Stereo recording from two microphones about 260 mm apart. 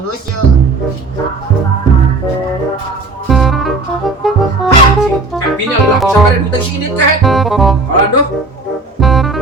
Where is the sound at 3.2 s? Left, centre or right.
Centre.